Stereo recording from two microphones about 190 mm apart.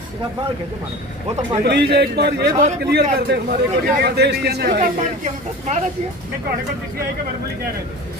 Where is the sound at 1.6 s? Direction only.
55° right (ahead or behind).